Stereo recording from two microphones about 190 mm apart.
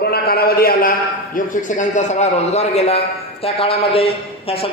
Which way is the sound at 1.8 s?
40° left (ahead or behind).